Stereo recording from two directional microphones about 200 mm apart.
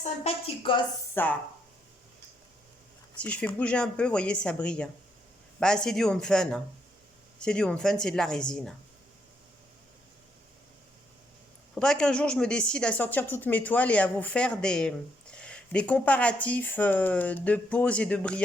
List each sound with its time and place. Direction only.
0.0 s a woman's voice: 30° left (ahead or behind)
1.1 s speech: 10° left (ahead or behind)
3.2 s speech: 5° left (ahead or behind)
11.7 s a woman's voice: 5° left (ahead or behind)